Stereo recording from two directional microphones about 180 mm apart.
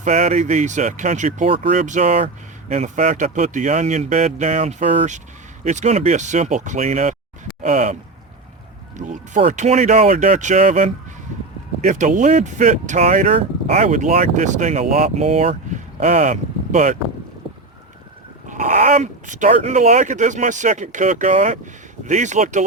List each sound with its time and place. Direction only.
0.0 s speech: 40° right (ahead or behind)
1.8 s speech: 40° right (ahead or behind)
9.0 s speech: 45° right (ahead or behind)
18.4 s speech: 45° right (ahead or behind)